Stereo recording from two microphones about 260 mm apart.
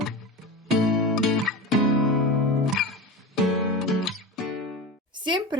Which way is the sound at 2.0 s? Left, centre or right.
Centre.